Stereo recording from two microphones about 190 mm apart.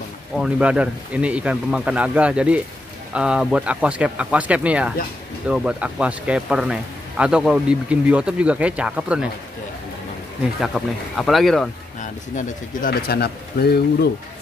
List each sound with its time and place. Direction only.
0.4 s speech: 5° right (ahead or behind)
10.6 s speech: centre (ahead or behind)
12.0 s speech: 45° left (ahead or behind)
13.2 s speech: 55° left (ahead or behind)